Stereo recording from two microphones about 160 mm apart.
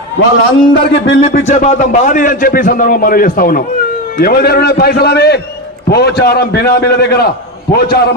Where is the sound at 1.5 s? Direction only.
45° left (ahead or behind); by 3.6 s 60° left (ahead or behind).